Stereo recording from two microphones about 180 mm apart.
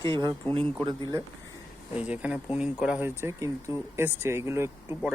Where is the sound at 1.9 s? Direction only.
5° right (ahead or behind).